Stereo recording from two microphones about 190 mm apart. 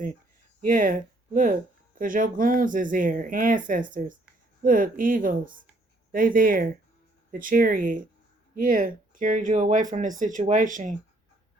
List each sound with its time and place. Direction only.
0.6 s speech: 45° right (ahead or behind)